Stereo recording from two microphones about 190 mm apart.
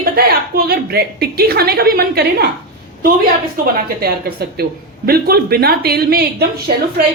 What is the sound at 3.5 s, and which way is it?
A woman's voice, 50° right (ahead or behind).